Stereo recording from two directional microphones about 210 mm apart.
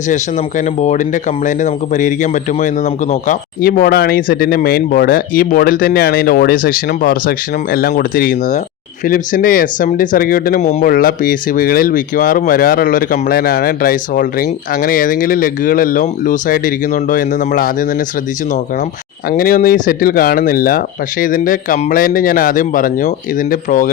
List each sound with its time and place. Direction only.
0.1 s speech: 35° left (ahead or behind)
19.3 s speech: 40° left (ahead or behind)